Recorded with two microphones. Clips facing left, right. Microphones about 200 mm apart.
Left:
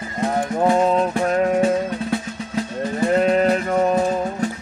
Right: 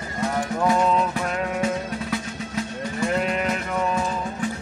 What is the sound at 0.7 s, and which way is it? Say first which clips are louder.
Music: left 4 dB; 35° left (ahead or behind).